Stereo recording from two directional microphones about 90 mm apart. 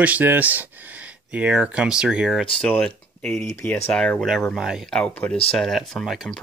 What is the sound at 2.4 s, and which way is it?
Speech, 10° left (ahead or behind).